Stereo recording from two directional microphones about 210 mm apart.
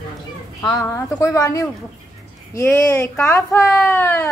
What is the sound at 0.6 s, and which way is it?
A woman's voice, 15° left (ahead or behind).